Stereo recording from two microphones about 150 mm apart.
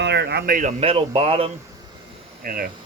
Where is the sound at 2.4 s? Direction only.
75° right (ahead or behind).